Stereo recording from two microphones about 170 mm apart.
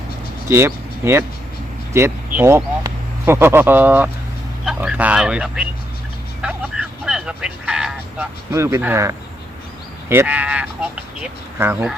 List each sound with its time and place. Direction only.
0.4 s speech: 15° right (ahead or behind)
6.4 s vehicle: 5° right (ahead or behind)
8.5 s speech: 15° right (ahead or behind)